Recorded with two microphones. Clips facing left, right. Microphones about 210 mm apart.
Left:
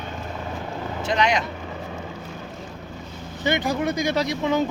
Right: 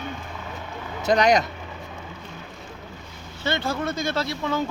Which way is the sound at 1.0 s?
40° right (ahead or behind).